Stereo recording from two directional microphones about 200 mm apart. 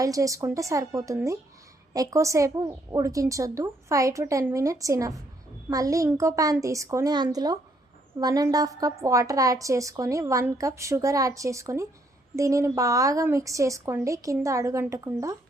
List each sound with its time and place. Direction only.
0.0 s a woman's voice: 15° right (ahead or behind)